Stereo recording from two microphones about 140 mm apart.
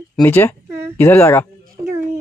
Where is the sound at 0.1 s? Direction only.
15° left (ahead or behind).